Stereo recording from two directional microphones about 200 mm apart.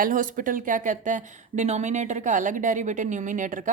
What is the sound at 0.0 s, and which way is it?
Speech, 40° right (ahead or behind).